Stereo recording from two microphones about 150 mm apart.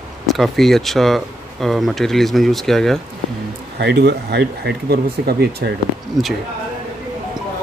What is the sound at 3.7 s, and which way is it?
Speech, 90° right.